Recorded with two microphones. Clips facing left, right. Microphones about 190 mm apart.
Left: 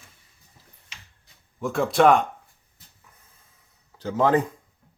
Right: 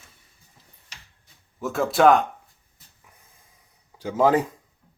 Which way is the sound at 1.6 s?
Centre (ahead or behind).